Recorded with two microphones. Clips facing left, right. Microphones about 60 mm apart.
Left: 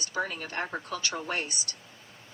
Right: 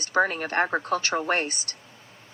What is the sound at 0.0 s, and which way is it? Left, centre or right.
A woman's voice, right.